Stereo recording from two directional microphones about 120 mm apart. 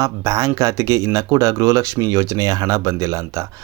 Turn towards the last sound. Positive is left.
turn(degrees=-25)  # may be behind; listen again after turning